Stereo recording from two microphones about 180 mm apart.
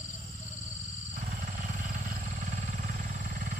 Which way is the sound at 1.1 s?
45° right (ahead or behind).